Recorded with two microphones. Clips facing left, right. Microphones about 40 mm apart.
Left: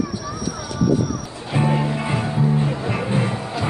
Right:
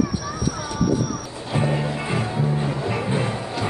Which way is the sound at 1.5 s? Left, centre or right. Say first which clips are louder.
Left 3 dB; centre.